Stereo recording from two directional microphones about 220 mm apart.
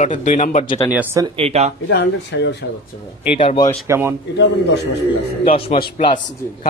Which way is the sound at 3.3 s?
25° left (ahead or behind).